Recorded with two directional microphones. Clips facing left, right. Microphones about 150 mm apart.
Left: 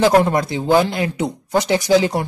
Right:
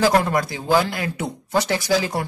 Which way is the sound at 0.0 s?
25° left (ahead or behind).